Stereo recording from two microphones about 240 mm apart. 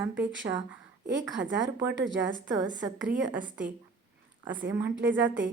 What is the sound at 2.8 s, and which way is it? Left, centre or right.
A woman's voice, centre.